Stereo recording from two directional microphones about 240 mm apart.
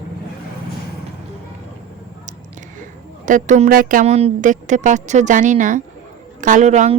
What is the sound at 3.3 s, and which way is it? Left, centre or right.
A woman's voice, right.